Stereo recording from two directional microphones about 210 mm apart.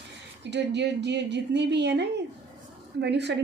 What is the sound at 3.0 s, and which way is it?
Speech, 55° right (ahead or behind).